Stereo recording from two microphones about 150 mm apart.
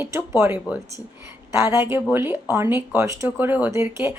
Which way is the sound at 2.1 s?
15° right (ahead or behind).